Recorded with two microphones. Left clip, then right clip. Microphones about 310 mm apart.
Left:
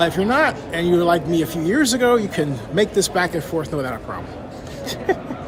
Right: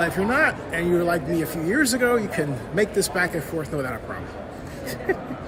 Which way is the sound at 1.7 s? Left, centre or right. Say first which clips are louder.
Left 4 dB; centre.